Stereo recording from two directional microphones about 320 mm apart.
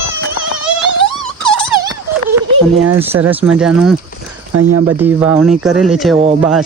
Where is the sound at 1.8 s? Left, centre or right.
Centre.